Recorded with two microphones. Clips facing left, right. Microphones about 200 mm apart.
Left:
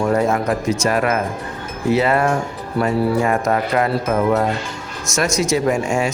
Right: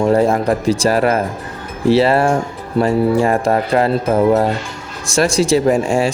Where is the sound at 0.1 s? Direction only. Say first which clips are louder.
Right 4 dB; 30° right (ahead or behind).